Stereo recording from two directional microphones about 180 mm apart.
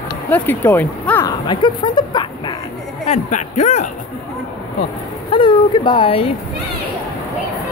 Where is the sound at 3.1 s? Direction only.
40° left (ahead or behind).